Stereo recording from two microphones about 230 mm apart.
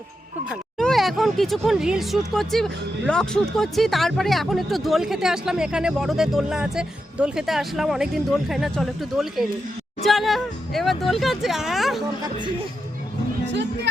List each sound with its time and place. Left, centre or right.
0.5 s speech: centre
12.2 s speech: centre